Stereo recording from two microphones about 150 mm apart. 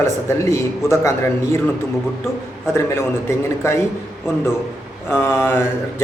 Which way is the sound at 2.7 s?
15° left (ahead or behind).